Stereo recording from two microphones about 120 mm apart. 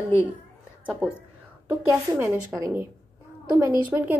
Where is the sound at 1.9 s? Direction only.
25° right (ahead or behind).